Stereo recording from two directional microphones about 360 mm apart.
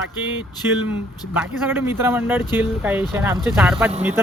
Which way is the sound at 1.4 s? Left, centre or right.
Centre.